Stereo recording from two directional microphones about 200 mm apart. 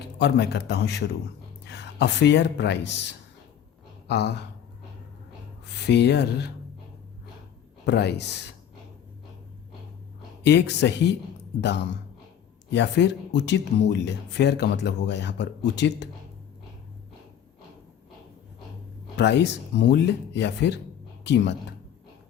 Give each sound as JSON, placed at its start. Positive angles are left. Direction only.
{"t": 0.2, "sound": "speech", "side_deg": 55}
{"t": 5.7, "sound": "speech", "side_deg": 55}
{"t": 7.9, "sound": "speech", "side_deg": 55}
{"t": 10.4, "sound": "speech", "side_deg": 60}
{"t": 19.1, "sound": "a woman's voice", "side_deg": 60}